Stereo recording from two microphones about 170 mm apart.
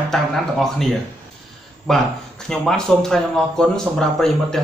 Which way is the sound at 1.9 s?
Centre (ahead or behind).